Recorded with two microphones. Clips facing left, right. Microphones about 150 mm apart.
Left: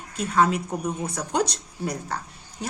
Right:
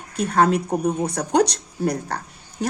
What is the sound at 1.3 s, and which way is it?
Speech, 70° right (ahead or behind).